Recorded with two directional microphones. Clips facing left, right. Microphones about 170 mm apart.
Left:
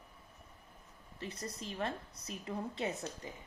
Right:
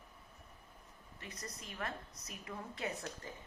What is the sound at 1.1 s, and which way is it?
A woman's voice, 30° left (ahead or behind).